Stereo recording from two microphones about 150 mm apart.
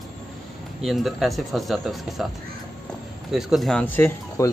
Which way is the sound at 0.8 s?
Centre (ahead or behind).